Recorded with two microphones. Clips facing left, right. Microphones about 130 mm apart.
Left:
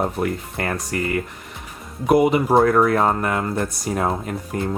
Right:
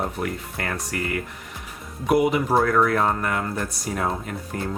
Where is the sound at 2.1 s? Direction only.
30° left (ahead or behind).